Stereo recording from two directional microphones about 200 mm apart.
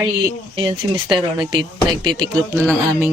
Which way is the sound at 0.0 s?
20° right (ahead or behind).